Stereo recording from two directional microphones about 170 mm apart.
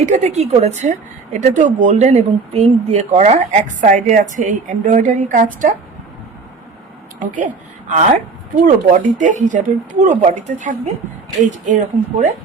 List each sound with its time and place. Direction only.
0.0 s a woman's voice: 40° right (ahead or behind)
7.2 s a woman's voice: 50° right (ahead or behind)